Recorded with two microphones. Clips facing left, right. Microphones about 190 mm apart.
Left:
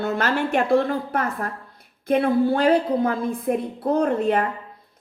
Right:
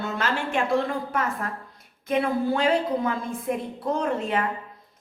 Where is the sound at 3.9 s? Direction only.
40° left (ahead or behind).